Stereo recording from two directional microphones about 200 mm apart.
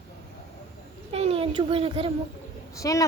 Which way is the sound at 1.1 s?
30° right (ahead or behind).